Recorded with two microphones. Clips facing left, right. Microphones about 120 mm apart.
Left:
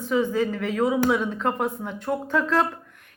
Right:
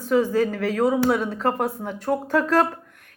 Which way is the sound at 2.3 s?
70° right (ahead or behind).